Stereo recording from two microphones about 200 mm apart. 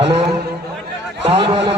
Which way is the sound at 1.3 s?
30° right (ahead or behind).